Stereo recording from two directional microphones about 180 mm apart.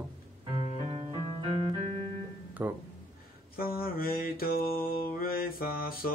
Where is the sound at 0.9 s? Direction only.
35° right (ahead or behind).